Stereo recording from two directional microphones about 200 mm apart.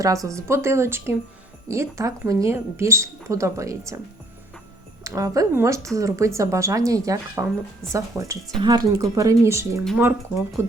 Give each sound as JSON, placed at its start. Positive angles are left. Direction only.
{"t": 0.0, "sound": "speech", "side_deg": -15}
{"t": 5.0, "sound": "speech", "side_deg": -15}